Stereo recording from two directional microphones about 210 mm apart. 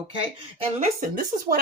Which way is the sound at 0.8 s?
40° right (ahead or behind).